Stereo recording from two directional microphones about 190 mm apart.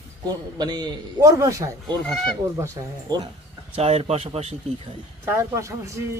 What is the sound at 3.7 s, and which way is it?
Speech, 35° right (ahead or behind).